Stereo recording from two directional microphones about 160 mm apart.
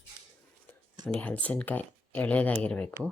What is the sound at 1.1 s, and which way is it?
Speech, 10° left (ahead or behind).